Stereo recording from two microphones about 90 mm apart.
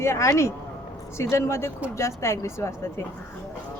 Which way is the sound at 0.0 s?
30° left (ahead or behind).